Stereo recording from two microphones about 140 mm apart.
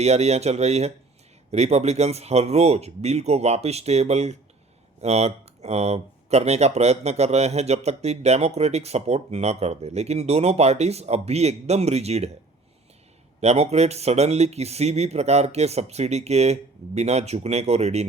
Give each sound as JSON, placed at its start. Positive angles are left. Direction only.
{"t": 0.0, "sound": "speech", "side_deg": -50}
{"t": 13.4, "sound": "speech", "side_deg": -50}